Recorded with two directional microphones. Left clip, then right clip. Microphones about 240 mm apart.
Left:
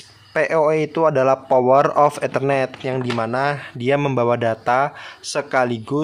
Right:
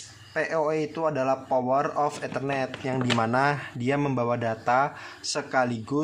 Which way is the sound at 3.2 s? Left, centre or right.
Centre.